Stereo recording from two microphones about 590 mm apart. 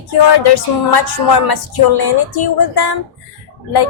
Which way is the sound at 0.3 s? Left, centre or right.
Left.